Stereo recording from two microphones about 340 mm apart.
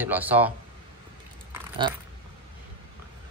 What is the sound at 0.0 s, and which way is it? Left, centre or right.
Speech, centre.